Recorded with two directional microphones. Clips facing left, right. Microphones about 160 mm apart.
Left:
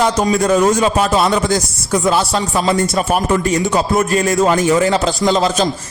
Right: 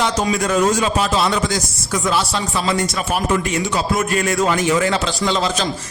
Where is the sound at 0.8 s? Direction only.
45° left (ahead or behind).